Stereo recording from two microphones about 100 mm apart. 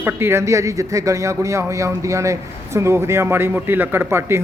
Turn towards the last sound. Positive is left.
turn(degrees=-25)  # may be behind; listen again after turning